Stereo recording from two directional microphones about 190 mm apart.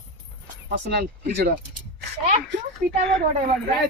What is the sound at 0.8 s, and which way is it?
Speech, 60° right (ahead or behind).